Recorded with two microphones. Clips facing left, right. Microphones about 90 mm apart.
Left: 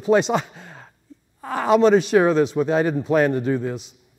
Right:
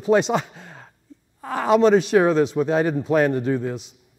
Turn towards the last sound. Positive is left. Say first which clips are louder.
# even
turn(degrees=25)  # may be behind; listen again after turning